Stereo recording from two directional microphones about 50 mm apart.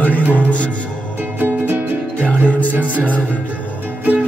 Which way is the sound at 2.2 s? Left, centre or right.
Left.